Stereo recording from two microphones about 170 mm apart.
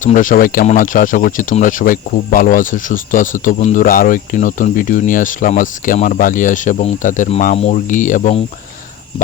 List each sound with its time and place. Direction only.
0.0 s speech: 50° left (ahead or behind)